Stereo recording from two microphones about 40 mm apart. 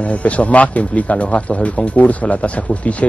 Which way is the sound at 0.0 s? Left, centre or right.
Left.